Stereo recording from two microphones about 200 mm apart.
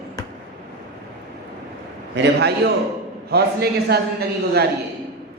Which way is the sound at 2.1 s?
55° right (ahead or behind).